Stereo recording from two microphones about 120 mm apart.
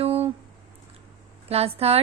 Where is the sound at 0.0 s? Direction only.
55° right (ahead or behind).